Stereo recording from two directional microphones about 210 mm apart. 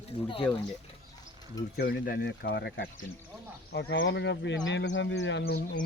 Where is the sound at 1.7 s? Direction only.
45° left (ahead or behind).